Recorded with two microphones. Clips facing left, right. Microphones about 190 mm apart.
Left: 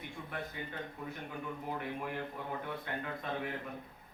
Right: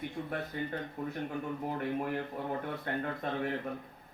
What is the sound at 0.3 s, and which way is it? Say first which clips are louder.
A man's voice: right 4 dB; 45° right (ahead or behind).